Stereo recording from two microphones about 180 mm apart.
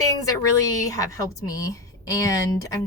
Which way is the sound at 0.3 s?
20° left (ahead or behind).